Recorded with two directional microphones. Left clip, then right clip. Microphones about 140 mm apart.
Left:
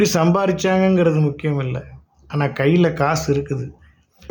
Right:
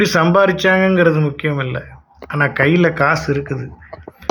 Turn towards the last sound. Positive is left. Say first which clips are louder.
# right 1 dB
turn(degrees=30)  # may be behind; listen again after turning